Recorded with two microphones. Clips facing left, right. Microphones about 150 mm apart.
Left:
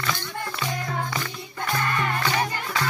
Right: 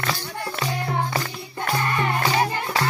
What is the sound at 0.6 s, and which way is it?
Music, 35° right (ahead or behind).